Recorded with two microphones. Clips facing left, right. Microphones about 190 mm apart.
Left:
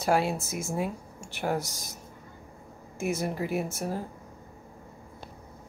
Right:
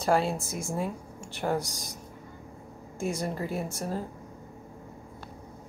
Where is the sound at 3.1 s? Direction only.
5° left (ahead or behind).